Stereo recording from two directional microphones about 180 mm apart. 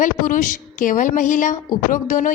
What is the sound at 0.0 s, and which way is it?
A woman's voice, 45° left (ahead or behind).